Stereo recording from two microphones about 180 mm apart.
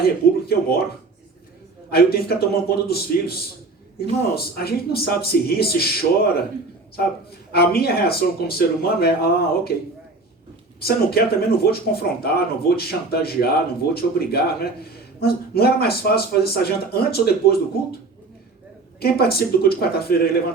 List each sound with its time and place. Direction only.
0.0 s a man's voice: 60° left (ahead or behind)
1.9 s a man's voice: 60° left (ahead or behind)
7.5 s a man's voice: 60° left (ahead or behind)
10.8 s a man's voice: 60° left (ahead or behind)
18.9 s a man's voice: 60° left (ahead or behind)